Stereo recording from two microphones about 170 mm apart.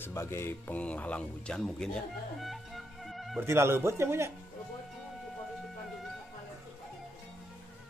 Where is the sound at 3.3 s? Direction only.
15° right (ahead or behind).